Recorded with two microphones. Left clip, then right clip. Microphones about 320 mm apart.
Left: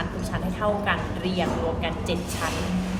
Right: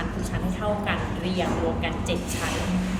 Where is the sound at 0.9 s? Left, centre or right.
Centre.